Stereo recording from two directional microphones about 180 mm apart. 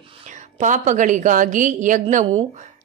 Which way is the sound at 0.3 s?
45° right (ahead or behind).